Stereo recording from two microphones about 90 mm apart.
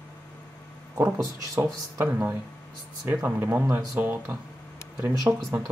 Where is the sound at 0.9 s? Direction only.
25° right (ahead or behind).